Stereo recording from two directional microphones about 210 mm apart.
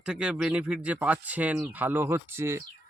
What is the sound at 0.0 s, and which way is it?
Speech, 5° right (ahead or behind).